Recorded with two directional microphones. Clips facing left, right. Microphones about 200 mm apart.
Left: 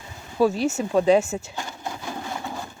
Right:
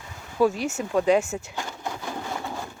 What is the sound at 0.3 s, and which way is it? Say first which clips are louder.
Speech: left 1 dB; 35° left (ahead or behind).